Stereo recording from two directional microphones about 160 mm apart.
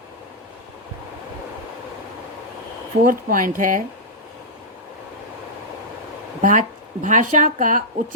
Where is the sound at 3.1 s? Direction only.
60° right (ahead or behind).